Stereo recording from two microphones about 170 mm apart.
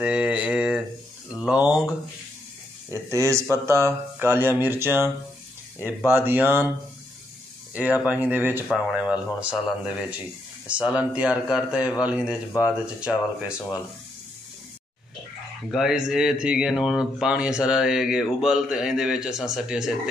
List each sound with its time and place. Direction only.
0.0 s a sound: 5° right (ahead or behind)
2.9 s speech: 15° right (ahead or behind)
6.0 s speech: 10° right (ahead or behind)
7.7 s speech: 10° right (ahead or behind)
15.7 s speech: centre (ahead or behind)